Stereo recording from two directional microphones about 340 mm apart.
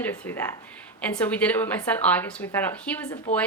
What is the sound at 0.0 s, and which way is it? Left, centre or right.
A woman's voice, centre.